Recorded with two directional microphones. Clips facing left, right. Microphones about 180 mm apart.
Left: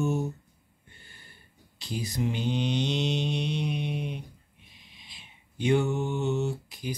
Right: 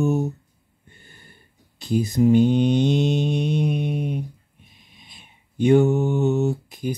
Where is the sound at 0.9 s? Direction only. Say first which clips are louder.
Right 5 dB; 50° right (ahead or behind).